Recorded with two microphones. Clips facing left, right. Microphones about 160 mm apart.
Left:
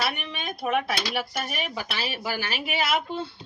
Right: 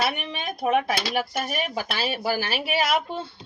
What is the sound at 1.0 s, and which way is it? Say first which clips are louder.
A woman's voice: right 3 dB; 40° right (ahead or behind).